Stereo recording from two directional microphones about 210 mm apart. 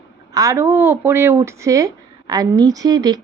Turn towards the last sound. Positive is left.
turn(degrees=-20)  # may be behind; listen again after turning